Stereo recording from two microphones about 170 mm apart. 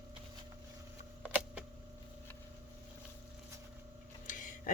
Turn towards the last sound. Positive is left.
turn(degrees=50)  # may be behind; listen again after turning